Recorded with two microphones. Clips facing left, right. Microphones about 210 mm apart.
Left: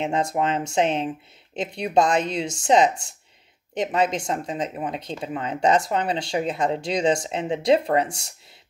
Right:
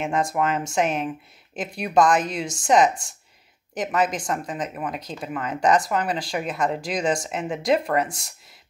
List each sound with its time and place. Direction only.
0.0 s speech: 25° left (ahead or behind)
2.9 s speech: 65° left (ahead or behind)
3.7 s speech: 25° left (ahead or behind)